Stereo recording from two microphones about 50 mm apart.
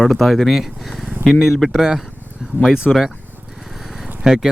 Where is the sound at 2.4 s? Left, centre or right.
Centre.